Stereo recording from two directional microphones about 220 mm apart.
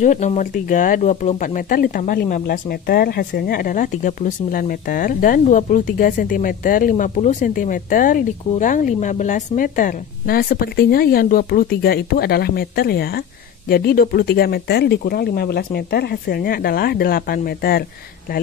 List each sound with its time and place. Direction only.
0.0 s speech: 35° left (ahead or behind)